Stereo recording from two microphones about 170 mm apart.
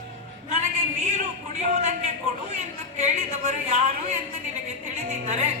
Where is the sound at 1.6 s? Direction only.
45° right (ahead or behind).